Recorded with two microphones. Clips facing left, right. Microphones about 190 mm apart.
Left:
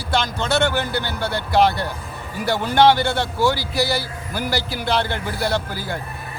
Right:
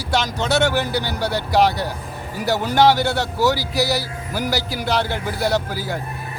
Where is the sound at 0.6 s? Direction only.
10° right (ahead or behind).